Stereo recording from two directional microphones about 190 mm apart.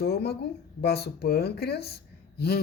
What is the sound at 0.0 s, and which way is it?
Speech, 55° left (ahead or behind).